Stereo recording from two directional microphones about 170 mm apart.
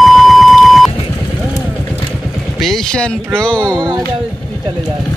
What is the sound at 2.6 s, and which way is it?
Speech, centre (ahead or behind).